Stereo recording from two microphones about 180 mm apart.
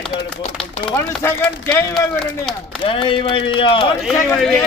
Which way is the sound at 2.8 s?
30° left (ahead or behind).